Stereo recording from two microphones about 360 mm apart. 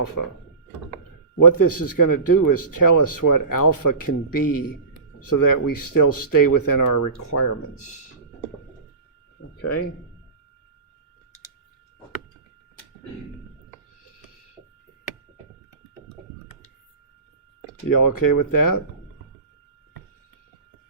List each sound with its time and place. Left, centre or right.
0.2 s speech: left
1.4 s speech: left
9.6 s speech: left
17.8 s speech: left